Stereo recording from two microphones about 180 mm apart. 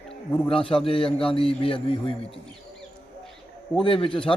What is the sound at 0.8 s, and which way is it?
A man's voice, 30° left (ahead or behind).